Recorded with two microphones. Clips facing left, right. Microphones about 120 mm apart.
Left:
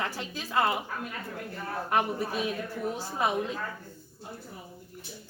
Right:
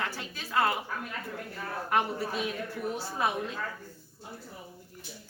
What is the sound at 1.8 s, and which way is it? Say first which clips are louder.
A woman's voice: left 1 dB; 15° left (ahead or behind).